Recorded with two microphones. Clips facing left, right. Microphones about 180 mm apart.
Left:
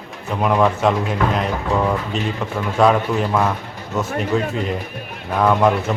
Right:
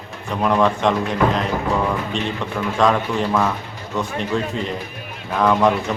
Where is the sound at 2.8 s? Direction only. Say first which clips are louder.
Left 3 dB; 5° left (ahead or behind).